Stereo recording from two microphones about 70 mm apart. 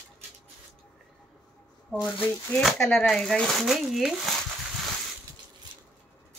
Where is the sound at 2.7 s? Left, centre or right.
Centre.